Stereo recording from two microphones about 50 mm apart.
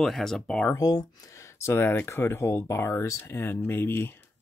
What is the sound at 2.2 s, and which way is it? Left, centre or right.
Speech, left.